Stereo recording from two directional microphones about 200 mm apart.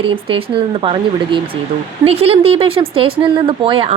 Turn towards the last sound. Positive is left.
turn(degrees=-25)  # may be behind; listen again after turning